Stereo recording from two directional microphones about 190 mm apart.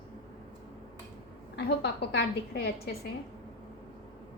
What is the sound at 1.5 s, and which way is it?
A woman's voice, 60° left (ahead or behind).